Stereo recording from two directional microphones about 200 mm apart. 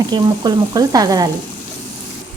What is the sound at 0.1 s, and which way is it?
Frying, 20° right (ahead or behind).